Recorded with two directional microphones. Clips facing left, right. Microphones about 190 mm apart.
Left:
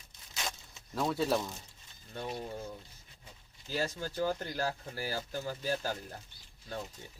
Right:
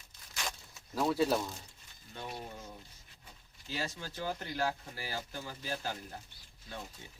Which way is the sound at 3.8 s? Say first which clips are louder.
Left 6 dB; 45° left (ahead or behind).